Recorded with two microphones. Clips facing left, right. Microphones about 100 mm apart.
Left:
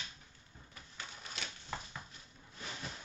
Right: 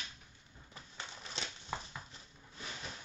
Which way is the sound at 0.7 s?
30° right (ahead or behind).